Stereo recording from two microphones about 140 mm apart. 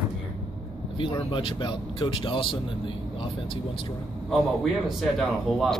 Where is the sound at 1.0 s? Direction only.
40° left (ahead or behind).